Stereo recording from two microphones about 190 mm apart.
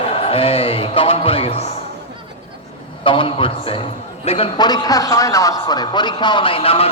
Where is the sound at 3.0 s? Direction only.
25° left (ahead or behind).